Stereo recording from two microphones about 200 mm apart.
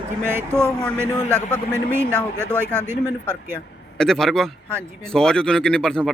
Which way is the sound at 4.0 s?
Centre (ahead or behind).